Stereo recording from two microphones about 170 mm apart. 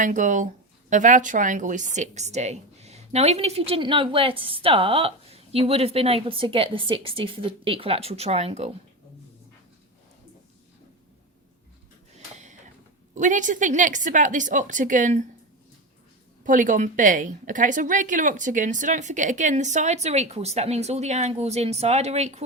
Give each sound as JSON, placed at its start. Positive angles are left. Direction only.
{"t": 0.0, "sound": "a woman's voice", "side_deg": -50}
{"t": 12.1, "sound": "a sound", "side_deg": -45}
{"t": 13.1, "sound": "a woman's voice", "side_deg": -50}
{"t": 16.4, "sound": "a woman's voice", "side_deg": -50}